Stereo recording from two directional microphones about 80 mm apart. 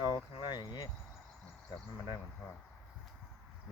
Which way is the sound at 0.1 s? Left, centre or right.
Left.